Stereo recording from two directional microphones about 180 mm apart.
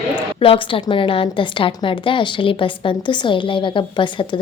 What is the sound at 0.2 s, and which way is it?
A woman's voice, 30° left (ahead or behind).